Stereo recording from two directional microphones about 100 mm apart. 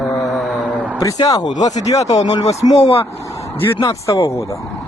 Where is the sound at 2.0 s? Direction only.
90° left.